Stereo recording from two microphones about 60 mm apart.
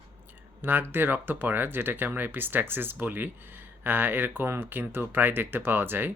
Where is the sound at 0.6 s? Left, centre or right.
Right.